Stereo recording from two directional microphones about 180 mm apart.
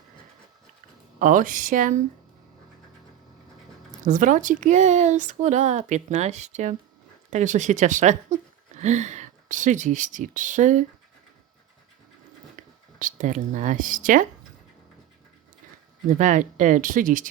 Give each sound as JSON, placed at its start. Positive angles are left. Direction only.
{"t": 1.2, "sound": "speech", "side_deg": -45}
{"t": 4.0, "sound": "speech", "side_deg": -45}
{"t": 12.5, "sound": "speech", "side_deg": -45}
{"t": 16.0, "sound": "speech", "side_deg": -45}